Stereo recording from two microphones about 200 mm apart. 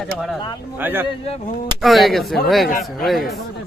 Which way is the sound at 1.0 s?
30° left (ahead or behind).